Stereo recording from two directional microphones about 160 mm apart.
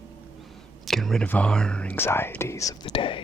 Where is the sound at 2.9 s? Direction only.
35° left (ahead or behind).